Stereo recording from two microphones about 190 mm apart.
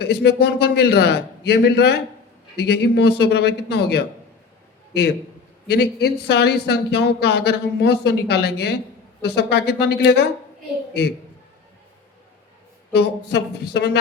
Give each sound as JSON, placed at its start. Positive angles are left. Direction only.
{"t": 0.0, "sound": "a man's voice", "side_deg": 60}
{"t": 5.6, "sound": "a man's voice", "side_deg": 60}
{"t": 12.9, "sound": "a man's voice", "side_deg": 60}